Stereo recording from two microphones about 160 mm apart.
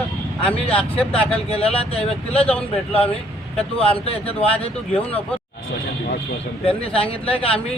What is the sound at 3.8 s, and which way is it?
Speech, 35° left (ahead or behind).